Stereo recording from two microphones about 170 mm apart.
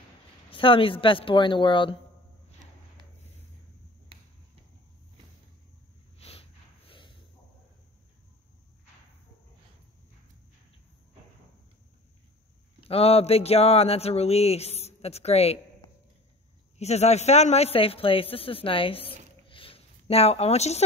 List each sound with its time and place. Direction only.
0.5 s speech: 30° left (ahead or behind)
6.1 s a sound: 35° left (ahead or behind)
12.8 s a man's voice: 35° left (ahead or behind)